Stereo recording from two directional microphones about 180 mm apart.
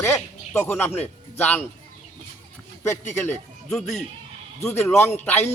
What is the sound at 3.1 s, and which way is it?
Speech, 10° left (ahead or behind).